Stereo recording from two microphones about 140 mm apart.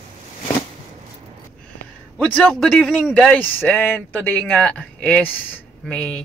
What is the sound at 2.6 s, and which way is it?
A man's voice, 5° left (ahead or behind).